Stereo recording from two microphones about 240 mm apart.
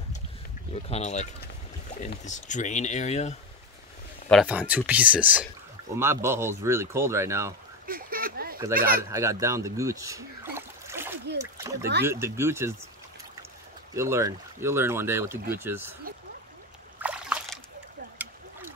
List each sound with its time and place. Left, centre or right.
0.8 s speech: left
4.3 s speech: centre
7.8 s a sound: right
8.7 s speech: right
9.1 s a sound: centre
11.5 s splash: centre
12.0 s speech: centre
13.9 s speech: centre
17.0 s a sound: centre